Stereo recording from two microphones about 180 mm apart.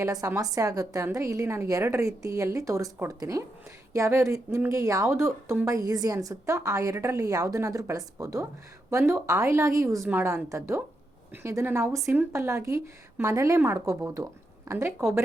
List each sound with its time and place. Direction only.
0.0 s a woman's voice: 20° right (ahead or behind)